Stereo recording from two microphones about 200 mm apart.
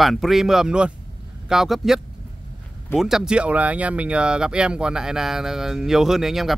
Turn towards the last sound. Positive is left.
turn(degrees=0)  # may be behind; listen again after turning